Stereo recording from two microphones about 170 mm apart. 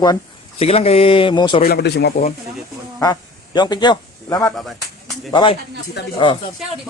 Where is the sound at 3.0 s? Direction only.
25° left (ahead or behind).